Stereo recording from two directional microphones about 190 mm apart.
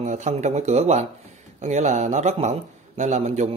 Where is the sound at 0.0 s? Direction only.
40° right (ahead or behind).